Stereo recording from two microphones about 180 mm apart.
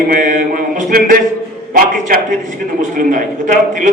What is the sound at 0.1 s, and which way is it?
Mantra, 45° right (ahead or behind).